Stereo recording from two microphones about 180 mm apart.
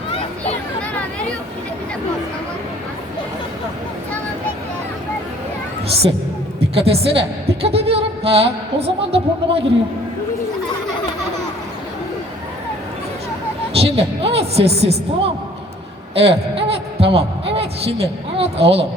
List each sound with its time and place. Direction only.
6.7 s a woman's voice: 30° right (ahead or behind)
13.7 s a woman's voice: 30° right (ahead or behind)